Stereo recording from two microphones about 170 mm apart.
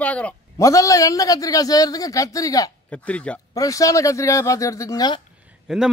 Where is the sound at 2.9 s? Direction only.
5° left (ahead or behind).